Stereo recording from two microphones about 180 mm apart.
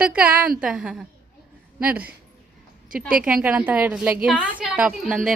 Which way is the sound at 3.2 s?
5° right (ahead or behind).